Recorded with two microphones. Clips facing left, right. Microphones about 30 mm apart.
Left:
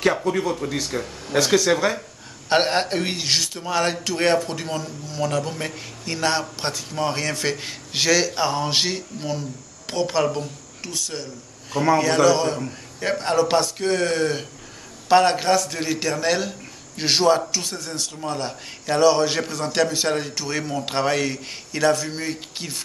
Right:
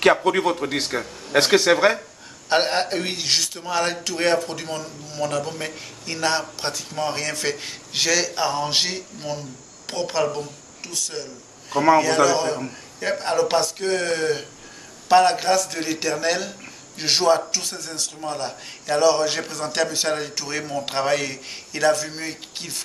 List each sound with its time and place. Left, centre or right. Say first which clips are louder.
0.0 s a man's voice: right 3 dB; right
2.5 s a man's voice: left 1 dB; centre
11.7 s a man's voice: right 3 dB; centre
12.0 s a man's voice: left 1 dB; centre